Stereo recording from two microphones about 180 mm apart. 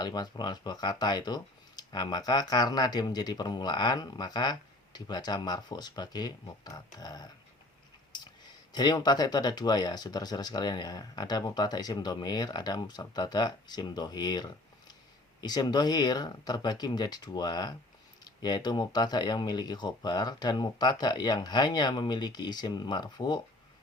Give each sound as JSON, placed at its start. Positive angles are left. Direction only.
{"t": 0.0, "sound": "speech", "side_deg": 25}
{"t": 8.1, "sound": "clicking", "side_deg": 25}
{"t": 8.7, "sound": "speech", "side_deg": 25}